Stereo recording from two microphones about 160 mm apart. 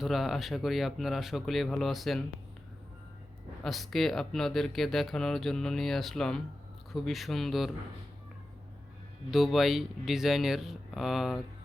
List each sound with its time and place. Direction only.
0.0 s speech: centre (ahead or behind)
3.6 s speech: centre (ahead or behind)
9.3 s speech: centre (ahead or behind)